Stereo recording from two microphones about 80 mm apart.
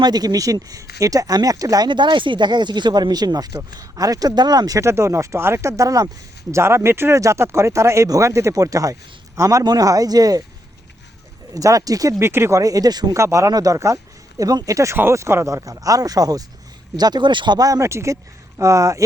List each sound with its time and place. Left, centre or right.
0.0 s speech: right
1.9 s speech: right
4.8 s speech: right
6.5 s speech: right
11.5 s speech: right
12.2 s speech: right
13.1 s speech: right
17.0 s speech: right
17.6 s speech: right